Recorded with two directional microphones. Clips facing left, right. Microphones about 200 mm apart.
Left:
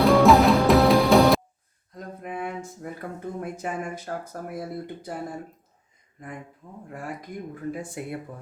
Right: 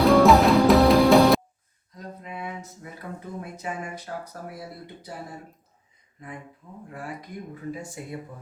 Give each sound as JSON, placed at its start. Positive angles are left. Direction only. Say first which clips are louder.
{"t": 0.0, "sound": "music", "louder": "even", "side_deg": 0}
{"t": 2.0, "sound": "a sound", "louder": "left 4 dB", "side_deg": 50}
{"t": 3.4, "sound": "speech", "louder": "left 4 dB", "side_deg": 50}
{"t": 8.0, "sound": "speech", "louder": "left 4 dB", "side_deg": 65}